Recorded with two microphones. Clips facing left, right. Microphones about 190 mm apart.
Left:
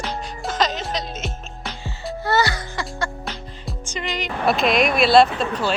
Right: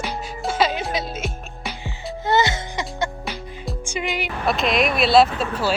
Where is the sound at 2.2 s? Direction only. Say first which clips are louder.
Right 1 dB; 20° right (ahead or behind).